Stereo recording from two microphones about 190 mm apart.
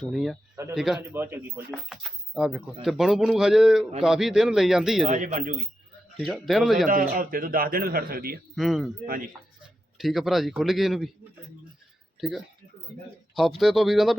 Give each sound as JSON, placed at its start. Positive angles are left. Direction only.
{"t": 0.0, "sound": "speech", "side_deg": 0}
{"t": 0.5, "sound": "speech", "side_deg": -20}
{"t": 0.8, "sound": "speech", "side_deg": -5}
{"t": 2.3, "sound": "speech", "side_deg": 0}
{"t": 5.0, "sound": "a man's voice", "side_deg": -40}
{"t": 6.1, "sound": "speech", "side_deg": 0}
{"t": 6.8, "sound": "a man's voice", "side_deg": -50}
{"t": 8.5, "sound": "speech", "side_deg": 0}
{"t": 9.0, "sound": "a man's voice", "side_deg": -45}
{"t": 10.0, "sound": "speech", "side_deg": 0}
{"t": 13.3, "sound": "speech", "side_deg": 0}